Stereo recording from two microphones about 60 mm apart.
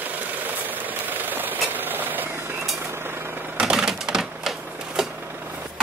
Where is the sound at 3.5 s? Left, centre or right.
Centre.